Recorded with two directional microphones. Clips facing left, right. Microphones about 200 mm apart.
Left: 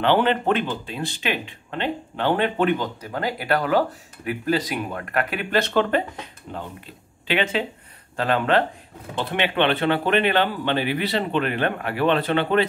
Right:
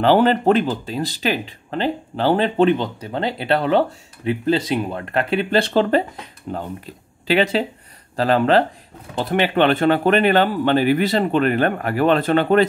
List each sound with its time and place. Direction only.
0.0 s speech: 40° right (ahead or behind)
7.2 s speech: 35° right (ahead or behind)